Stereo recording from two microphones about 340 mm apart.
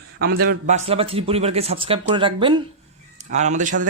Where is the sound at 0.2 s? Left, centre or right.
Right.